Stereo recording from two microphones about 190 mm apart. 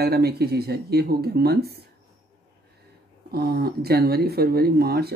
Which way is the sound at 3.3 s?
50° right (ahead or behind).